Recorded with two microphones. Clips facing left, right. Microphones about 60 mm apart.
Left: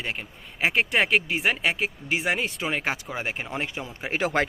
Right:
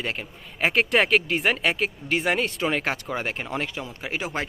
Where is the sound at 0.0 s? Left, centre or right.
Centre; by 4.1 s left.